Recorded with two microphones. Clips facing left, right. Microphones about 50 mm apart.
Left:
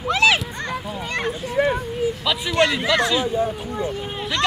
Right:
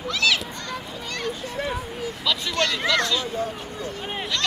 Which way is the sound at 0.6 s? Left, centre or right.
Left.